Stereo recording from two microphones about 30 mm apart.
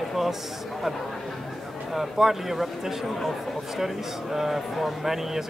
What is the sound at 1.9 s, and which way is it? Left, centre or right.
Speech, centre.